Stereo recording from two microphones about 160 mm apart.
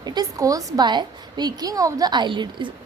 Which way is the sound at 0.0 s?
25° right (ahead or behind).